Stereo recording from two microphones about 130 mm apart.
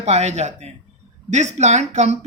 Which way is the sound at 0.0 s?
60° right (ahead or behind).